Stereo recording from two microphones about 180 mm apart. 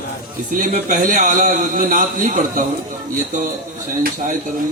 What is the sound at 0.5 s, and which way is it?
A man's voice, 45° right (ahead or behind).